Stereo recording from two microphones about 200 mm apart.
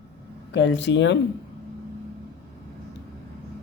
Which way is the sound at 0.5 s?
65° left (ahead or behind).